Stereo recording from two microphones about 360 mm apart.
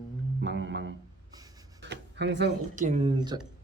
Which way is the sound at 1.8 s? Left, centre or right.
Right.